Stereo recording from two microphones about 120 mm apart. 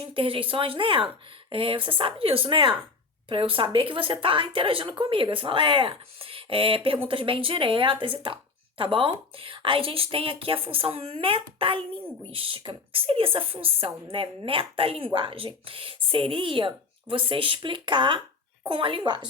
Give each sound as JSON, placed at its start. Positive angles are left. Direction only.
{"t": 0.1, "sound": "speech", "side_deg": -45}